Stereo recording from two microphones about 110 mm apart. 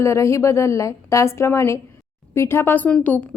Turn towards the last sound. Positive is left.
turn(degrees=15)  # may be behind; listen again after turning